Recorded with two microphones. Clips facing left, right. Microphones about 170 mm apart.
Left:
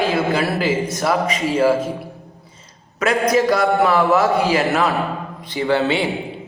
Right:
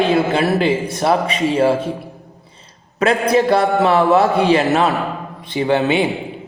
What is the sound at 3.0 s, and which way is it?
A man's voice, 30° right (ahead or behind).